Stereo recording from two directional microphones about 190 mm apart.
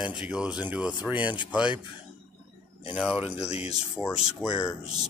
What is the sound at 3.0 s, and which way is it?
Speech, 5° right (ahead or behind).